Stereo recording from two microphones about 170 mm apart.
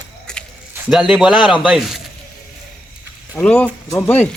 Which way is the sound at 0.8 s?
5° right (ahead or behind).